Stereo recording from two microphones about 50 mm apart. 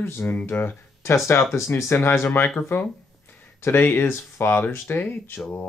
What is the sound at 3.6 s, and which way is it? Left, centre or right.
Speech, left.